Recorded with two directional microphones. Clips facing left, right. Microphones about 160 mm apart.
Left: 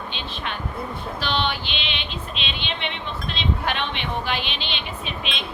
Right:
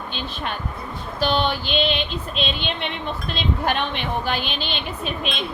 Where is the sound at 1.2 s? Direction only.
45° right (ahead or behind).